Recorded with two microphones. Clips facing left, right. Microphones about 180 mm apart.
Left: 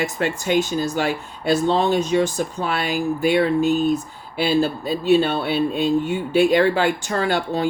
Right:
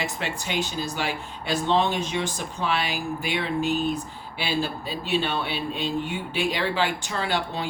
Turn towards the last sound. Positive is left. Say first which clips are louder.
# left 7 dB
turn(degrees=45)  # may be behind; listen again after turning